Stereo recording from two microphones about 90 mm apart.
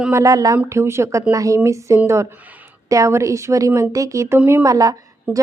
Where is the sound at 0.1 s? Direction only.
35° right (ahead or behind).